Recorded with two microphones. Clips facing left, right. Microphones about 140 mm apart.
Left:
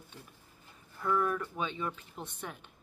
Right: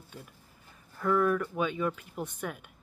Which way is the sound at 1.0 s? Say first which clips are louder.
Right 5 dB; 10° left (ahead or behind).